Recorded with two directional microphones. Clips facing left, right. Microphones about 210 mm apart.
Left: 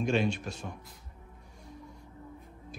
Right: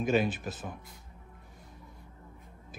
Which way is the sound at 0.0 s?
5° right (ahead or behind).